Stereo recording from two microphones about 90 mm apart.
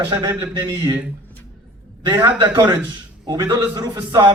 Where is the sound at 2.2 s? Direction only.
60° right (ahead or behind).